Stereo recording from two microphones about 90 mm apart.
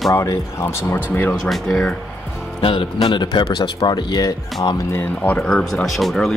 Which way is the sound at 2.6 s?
75° left (ahead or behind).